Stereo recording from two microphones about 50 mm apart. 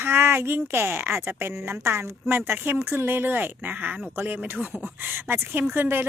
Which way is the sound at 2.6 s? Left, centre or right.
Right.